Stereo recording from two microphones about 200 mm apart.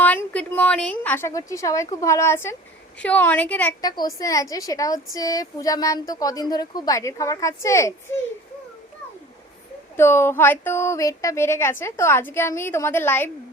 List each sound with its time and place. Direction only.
0.3 s a woman's voice: 5° left (ahead or behind)
3.8 s a woman's voice: 20° left (ahead or behind)
10.0 s a woman's voice: 10° left (ahead or behind)